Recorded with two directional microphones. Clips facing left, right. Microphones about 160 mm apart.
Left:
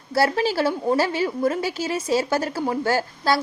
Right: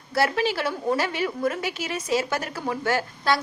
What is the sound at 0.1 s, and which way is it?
A woman's voice, 35° left (ahead or behind).